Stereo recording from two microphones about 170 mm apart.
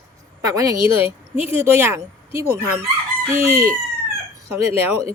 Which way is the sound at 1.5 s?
15° right (ahead or behind).